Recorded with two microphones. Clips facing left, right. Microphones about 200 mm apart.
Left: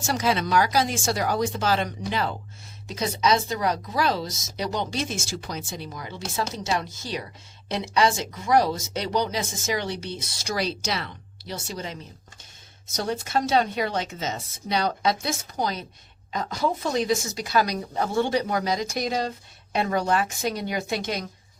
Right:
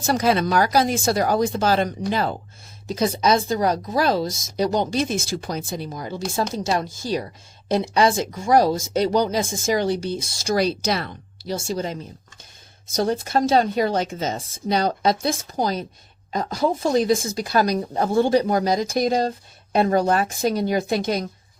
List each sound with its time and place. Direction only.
0.0 s speech: 55° right (ahead or behind)
5.0 s speech: 55° right (ahead or behind); by 6.8 s 30° right (ahead or behind)
6.8 s speech: 45° right (ahead or behind)
8.4 s speech: 45° right (ahead or behind)
9.5 s speech: 30° right (ahead or behind)
9.8 s speech: 45° right (ahead or behind)
13.0 s speech: 45° right (ahead or behind)
14.3 s speech: 40° right (ahead or behind)
17.3 s speech: 45° right (ahead or behind)